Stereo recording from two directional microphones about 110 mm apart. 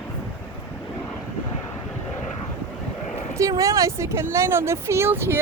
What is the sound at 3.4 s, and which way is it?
Speech, 30° right (ahead or behind).